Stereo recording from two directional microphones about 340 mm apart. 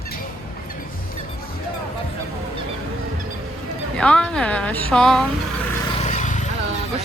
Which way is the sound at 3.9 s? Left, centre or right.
Centre.